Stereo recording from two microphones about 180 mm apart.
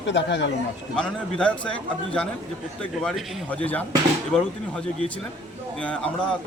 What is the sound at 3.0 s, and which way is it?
A man's voice, 5° left (ahead or behind).